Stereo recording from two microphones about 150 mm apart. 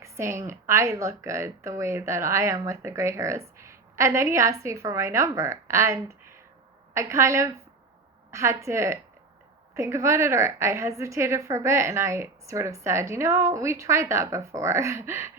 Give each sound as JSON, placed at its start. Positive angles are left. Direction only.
{"t": 0.0, "sound": "speech", "side_deg": -20}